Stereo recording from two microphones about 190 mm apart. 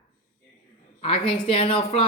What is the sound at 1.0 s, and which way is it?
A woman's voice, 30° left (ahead or behind).